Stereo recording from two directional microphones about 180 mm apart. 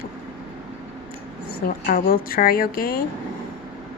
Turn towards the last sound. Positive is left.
turn(degrees=55)  # may be behind; listen again after turning